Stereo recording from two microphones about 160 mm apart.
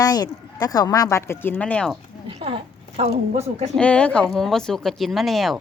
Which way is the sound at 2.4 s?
35° right (ahead or behind).